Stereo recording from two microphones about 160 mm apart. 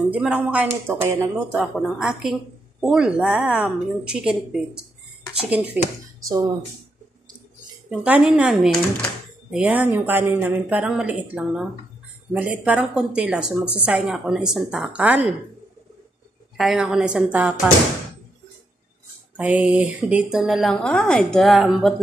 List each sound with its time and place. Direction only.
0.1 s speech: 5° right (ahead or behind)
1.8 s a woman's voice: 5° right (ahead or behind)
6.2 s speech: 20° right (ahead or behind)
7.9 s a woman's voice: 5° right (ahead or behind)
16.5 s a woman's voice: centre (ahead or behind)
19.3 s a woman's voice: 10° right (ahead or behind)